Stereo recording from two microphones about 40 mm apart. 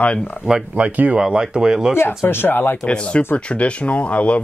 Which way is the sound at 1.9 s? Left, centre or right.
Left.